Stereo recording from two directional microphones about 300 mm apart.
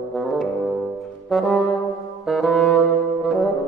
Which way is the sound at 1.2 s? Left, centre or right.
Centre.